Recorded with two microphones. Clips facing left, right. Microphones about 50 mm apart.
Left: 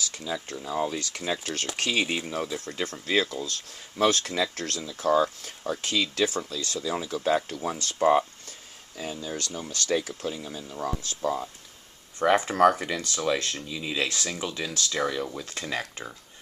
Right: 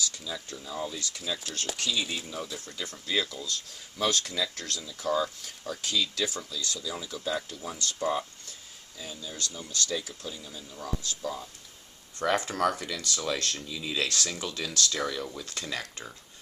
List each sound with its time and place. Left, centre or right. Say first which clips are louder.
0.1 s speech: left 6 dB; left
1.8 s speech: left 6 dB; left
8.9 s speech: left 7 dB; left
9.6 s speech: left 1 dB; left
9.8 s speech: left 7 dB; left
12.2 s speech: left 6 dB; left